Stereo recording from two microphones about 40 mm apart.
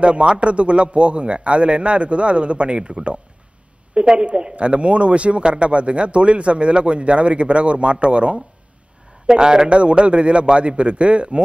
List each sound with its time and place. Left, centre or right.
0.0 s a man's voice: right
9.3 s a man's voice: centre